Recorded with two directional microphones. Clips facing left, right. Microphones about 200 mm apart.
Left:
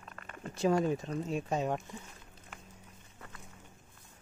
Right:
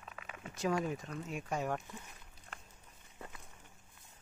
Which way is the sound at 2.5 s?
5° left (ahead or behind).